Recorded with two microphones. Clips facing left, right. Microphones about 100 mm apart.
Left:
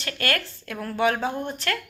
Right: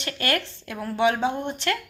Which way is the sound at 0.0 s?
25° right (ahead or behind).